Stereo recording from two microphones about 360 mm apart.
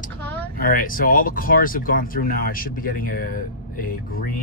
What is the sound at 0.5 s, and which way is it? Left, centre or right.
Speech, left.